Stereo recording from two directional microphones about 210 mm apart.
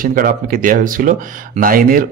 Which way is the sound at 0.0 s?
40° right (ahead or behind).